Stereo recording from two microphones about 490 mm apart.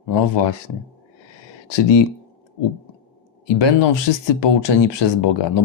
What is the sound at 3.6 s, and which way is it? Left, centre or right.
Speech, left.